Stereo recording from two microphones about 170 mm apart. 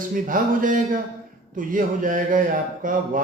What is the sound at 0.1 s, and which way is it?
Speech, 55° right (ahead or behind).